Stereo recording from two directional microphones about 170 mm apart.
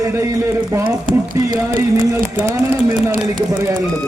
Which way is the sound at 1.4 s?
15° right (ahead or behind).